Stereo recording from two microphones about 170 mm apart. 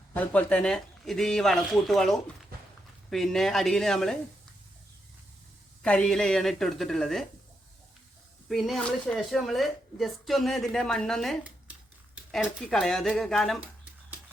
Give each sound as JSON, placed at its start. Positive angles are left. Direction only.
{"t": 0.1, "sound": "speech", "side_deg": 10}
{"t": 2.5, "sound": "a sound", "side_deg": -60}
{"t": 3.1, "sound": "speech", "side_deg": 0}
{"t": 5.8, "sound": "speech", "side_deg": 5}
{"t": 8.4, "sound": "speech", "side_deg": 0}